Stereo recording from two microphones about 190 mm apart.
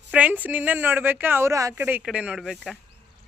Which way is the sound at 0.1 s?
5° right (ahead or behind).